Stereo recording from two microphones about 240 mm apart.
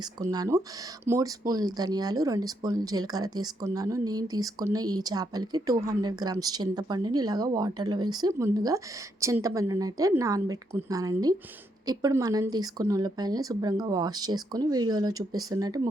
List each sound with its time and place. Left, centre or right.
0.2 s speech: centre